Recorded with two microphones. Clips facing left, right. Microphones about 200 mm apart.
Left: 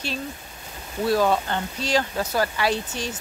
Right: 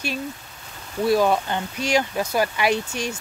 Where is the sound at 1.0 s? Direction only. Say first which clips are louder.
Right 2 dB; 10° right (ahead or behind).